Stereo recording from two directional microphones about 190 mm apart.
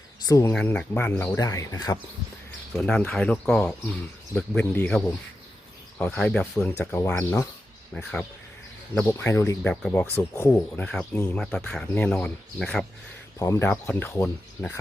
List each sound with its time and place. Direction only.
0.3 s speech: 15° left (ahead or behind)
2.7 s speech: 5° left (ahead or behind)
9.0 s speech: 10° left (ahead or behind)
13.4 s speech: 15° left (ahead or behind)